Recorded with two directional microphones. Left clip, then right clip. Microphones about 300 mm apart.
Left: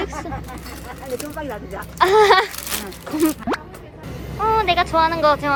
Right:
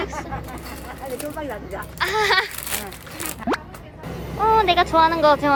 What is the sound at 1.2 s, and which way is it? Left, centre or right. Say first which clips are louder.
Speech: even; centre.